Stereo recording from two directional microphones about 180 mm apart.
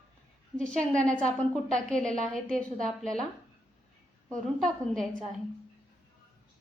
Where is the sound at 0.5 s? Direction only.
5° left (ahead or behind).